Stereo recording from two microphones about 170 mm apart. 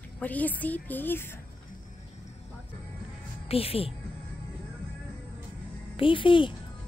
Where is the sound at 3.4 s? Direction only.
35° left (ahead or behind).